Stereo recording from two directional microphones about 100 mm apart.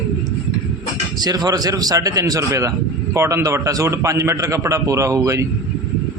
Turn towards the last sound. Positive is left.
turn(degrees=-30)  # may be behind; listen again after turning